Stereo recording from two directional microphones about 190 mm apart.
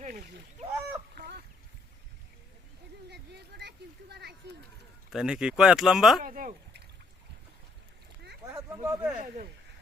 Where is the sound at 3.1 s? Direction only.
60° right (ahead or behind).